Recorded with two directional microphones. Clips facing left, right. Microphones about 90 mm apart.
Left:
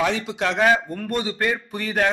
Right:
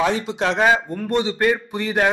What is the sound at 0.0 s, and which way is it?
A man's voice, 30° right (ahead or behind).